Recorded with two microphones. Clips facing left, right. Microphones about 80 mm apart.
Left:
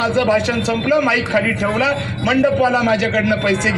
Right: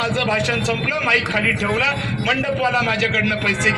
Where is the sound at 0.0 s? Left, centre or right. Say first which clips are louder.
Left 5 dB; centre.